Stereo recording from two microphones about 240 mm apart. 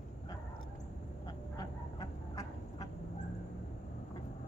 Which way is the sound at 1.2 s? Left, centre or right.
Centre.